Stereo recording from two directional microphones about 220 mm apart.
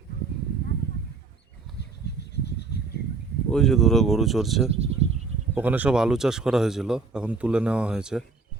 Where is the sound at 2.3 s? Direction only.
50° left (ahead or behind).